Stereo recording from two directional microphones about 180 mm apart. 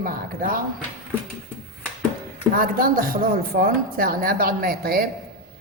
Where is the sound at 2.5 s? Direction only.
50° right (ahead or behind).